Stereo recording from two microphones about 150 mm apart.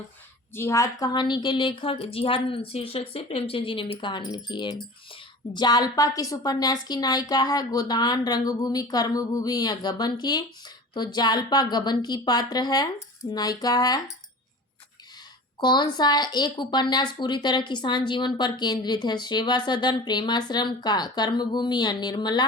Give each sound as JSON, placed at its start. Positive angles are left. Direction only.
{"t": 0.5, "sound": "a woman's voice", "side_deg": 20}
{"t": 15.6, "sound": "speech", "side_deg": 30}